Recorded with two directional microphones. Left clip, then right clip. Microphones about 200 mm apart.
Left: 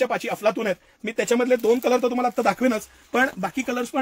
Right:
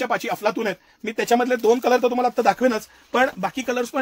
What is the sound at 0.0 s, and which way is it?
Speech, 45° right (ahead or behind).